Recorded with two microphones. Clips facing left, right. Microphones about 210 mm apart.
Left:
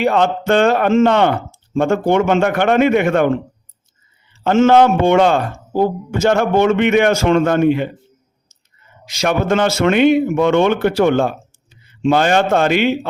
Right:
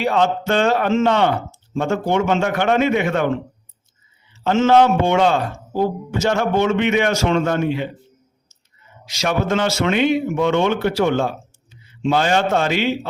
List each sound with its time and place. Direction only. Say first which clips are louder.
0.0 s speech: left 3 dB; 55° left (ahead or behind)
4.4 s speech: left 3 dB; 50° left (ahead or behind)
9.0 s speech: left 4 dB; 55° left (ahead or behind)